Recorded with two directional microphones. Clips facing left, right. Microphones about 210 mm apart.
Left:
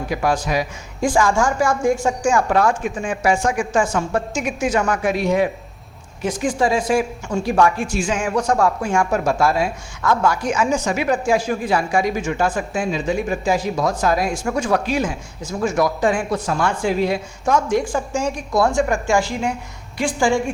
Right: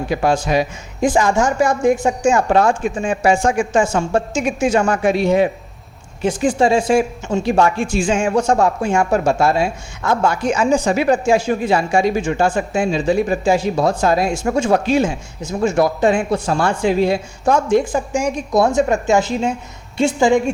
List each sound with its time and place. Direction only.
0.1 s speech: 25° right (ahead or behind)